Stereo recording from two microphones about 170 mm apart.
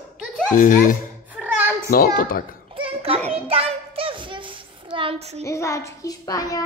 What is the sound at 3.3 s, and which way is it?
Hands, 35° right (ahead or behind).